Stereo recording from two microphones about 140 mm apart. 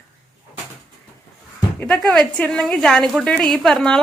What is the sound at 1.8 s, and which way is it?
A woman's voice, 5° left (ahead or behind).